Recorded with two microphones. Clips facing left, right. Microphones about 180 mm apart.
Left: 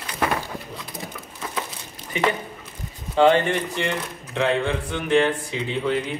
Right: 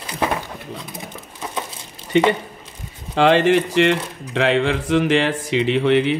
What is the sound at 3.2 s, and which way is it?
Speech, 85° right.